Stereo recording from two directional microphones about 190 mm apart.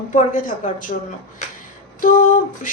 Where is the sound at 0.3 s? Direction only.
45° left (ahead or behind).